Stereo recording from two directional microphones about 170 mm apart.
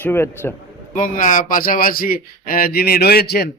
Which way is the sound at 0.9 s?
50° left (ahead or behind).